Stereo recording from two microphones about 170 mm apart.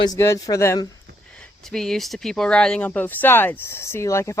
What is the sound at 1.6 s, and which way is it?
Speech, 5° left (ahead or behind).